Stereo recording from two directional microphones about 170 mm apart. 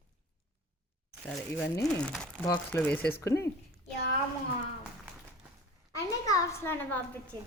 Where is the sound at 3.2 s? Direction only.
20° left (ahead or behind).